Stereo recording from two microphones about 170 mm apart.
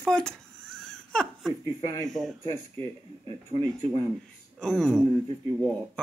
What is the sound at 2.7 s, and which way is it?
Speech, 30° right (ahead or behind).